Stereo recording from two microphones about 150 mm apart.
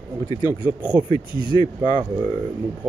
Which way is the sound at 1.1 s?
30° left (ahead or behind).